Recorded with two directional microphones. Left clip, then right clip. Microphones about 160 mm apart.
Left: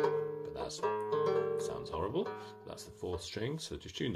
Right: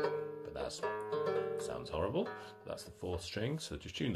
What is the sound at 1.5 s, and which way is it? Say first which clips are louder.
Music: left 2 dB; 10° left (ahead or behind).